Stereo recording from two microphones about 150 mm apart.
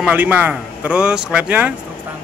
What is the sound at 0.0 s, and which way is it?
A man's voice, 10° right (ahead or behind).